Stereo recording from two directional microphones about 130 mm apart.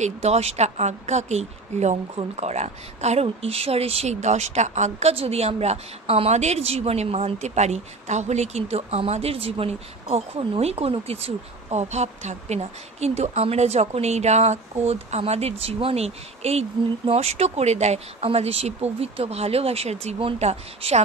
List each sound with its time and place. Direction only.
0.0 s speech: 55° right (ahead or behind)
5.1 s a woman's voice: 50° right (ahead or behind)